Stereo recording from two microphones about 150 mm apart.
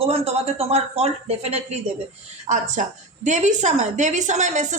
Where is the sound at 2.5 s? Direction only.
55° right (ahead or behind).